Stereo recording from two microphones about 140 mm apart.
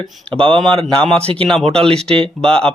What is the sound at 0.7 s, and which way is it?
Speech, 40° right (ahead or behind).